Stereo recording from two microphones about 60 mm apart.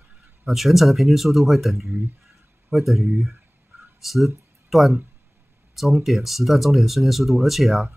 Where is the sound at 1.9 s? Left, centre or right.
Right.